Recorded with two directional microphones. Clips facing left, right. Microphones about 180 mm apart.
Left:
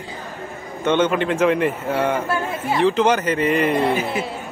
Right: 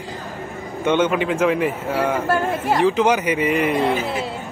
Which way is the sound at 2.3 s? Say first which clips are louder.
Right 3 dB; 40° right (ahead or behind).